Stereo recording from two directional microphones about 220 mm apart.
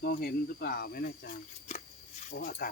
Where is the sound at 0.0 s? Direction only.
45° left (ahead or behind).